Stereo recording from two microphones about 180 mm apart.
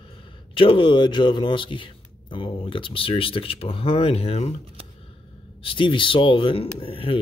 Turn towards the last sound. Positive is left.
turn(degrees=30)  # may be behind; listen again after turning